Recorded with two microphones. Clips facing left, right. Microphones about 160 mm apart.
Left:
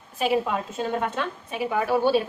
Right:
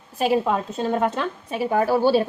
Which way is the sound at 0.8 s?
40° right (ahead or behind).